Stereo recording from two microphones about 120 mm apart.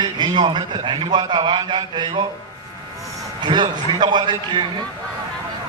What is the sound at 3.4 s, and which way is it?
A man's voice, 40° right (ahead or behind).